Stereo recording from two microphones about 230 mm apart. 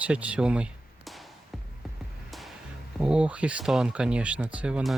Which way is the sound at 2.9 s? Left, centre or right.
Centre.